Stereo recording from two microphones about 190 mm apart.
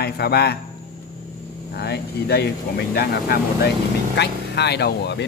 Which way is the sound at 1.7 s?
60° left (ahead or behind).